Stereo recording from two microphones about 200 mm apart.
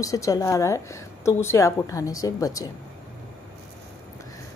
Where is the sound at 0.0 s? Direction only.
15° left (ahead or behind).